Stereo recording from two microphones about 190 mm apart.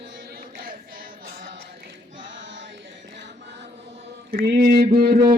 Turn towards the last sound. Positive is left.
turn(degrees=-55)  # may be behind; listen again after turning